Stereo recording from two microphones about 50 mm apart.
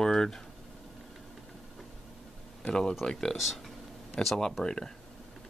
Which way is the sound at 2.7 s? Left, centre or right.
Centre.